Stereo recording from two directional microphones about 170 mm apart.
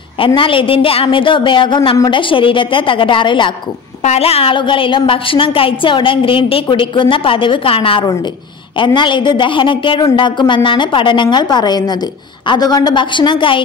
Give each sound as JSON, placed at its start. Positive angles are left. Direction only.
{"t": 0.2, "sound": "a woman's voice", "side_deg": 30}